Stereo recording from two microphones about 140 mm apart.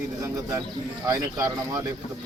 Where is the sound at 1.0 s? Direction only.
25° right (ahead or behind).